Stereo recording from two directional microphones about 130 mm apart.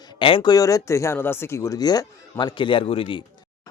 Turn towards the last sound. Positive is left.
turn(degrees=45)  # may be behind; listen again after turning